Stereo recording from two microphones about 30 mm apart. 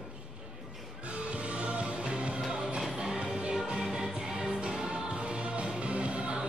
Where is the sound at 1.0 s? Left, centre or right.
Right.